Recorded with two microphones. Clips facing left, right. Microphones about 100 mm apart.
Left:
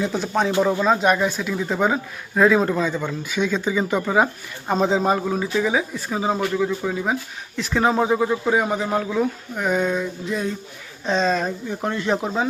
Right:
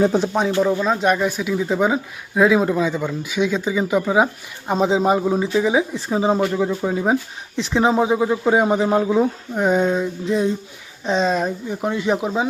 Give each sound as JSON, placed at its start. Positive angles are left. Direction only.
{"t": 0.8, "sound": "speech", "side_deg": 0}